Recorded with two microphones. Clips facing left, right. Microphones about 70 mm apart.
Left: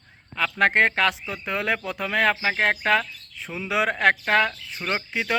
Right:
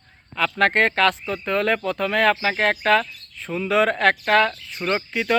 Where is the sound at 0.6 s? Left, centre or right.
Centre.